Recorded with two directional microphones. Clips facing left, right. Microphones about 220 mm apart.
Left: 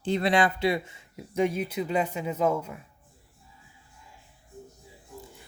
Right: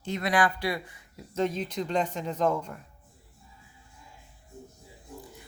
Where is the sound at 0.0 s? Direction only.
30° left (ahead or behind).